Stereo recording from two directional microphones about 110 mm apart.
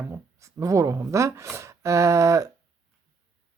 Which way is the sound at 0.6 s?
30° right (ahead or behind).